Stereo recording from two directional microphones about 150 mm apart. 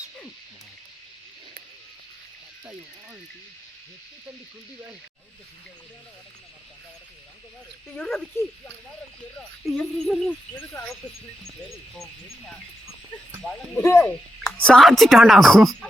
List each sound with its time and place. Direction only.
8.0 s speech: centre (ahead or behind)
9.6 s speech: centre (ahead or behind)
13.8 s speech: 15° left (ahead or behind)
14.1 s speech: 5° left (ahead or behind)